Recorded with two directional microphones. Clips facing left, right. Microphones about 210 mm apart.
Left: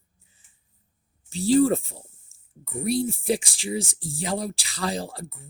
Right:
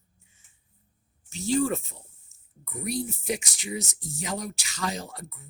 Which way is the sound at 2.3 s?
30° left (ahead or behind).